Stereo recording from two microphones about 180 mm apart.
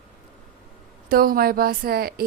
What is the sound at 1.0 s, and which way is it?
A woman's voice, 55° right (ahead or behind).